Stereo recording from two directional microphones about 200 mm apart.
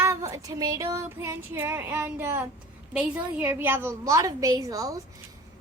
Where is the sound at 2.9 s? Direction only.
5° right (ahead or behind).